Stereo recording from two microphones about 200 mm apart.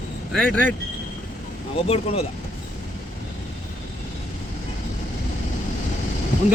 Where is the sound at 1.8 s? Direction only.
30° left (ahead or behind).